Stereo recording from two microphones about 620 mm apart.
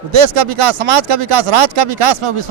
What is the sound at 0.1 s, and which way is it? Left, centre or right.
Speech, right.